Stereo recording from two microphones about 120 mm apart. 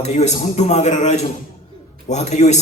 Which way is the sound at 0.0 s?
70° left (ahead or behind).